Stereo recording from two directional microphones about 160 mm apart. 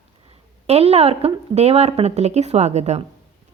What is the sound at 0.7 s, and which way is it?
A woman's voice, 40° right (ahead or behind).